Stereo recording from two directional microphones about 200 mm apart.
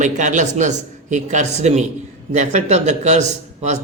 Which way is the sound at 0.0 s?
40° right (ahead or behind).